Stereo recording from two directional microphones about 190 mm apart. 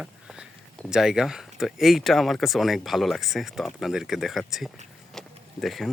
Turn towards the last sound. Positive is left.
turn(degrees=0)  # may be behind; listen again after turning